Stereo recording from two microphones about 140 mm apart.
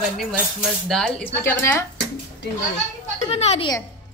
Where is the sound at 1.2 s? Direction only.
15° left (ahead or behind).